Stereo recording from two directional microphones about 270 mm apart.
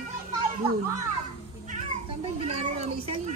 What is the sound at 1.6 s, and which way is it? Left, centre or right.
Speech, right.